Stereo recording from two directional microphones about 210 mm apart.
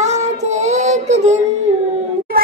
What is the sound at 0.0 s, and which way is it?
Child singing, 35° right (ahead or behind).